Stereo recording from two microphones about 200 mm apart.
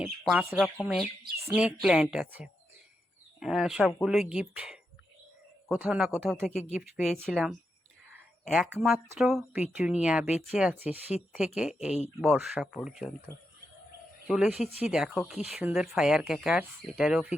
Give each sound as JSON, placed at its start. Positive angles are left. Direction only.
{"t": 0.0, "sound": "speech", "side_deg": -5}
{"t": 6.5, "sound": "speech", "side_deg": 35}
{"t": 6.8, "sound": "speech", "side_deg": 0}
{"t": 8.5, "sound": "speech", "side_deg": 0}
{"t": 14.3, "sound": "speech", "side_deg": -5}